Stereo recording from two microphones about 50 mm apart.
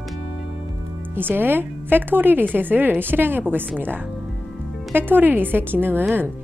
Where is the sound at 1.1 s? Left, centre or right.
Right.